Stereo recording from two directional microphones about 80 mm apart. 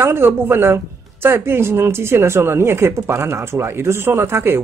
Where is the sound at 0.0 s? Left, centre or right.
Right.